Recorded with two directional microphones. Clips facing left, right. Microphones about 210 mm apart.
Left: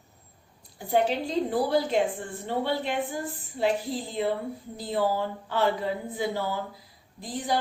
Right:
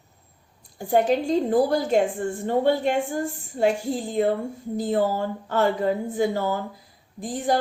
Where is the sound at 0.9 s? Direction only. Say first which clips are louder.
Right 5 dB; 45° right (ahead or behind).